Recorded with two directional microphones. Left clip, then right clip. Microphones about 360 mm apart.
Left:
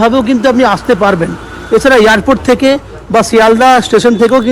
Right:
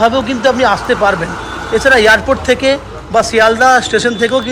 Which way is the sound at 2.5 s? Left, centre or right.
Centre.